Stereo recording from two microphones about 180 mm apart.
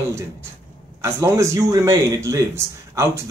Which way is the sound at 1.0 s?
15° right (ahead or behind).